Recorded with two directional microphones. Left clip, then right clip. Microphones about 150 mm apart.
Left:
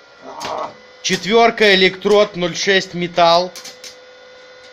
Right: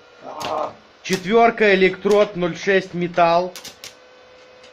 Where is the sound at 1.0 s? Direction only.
10° left (ahead or behind).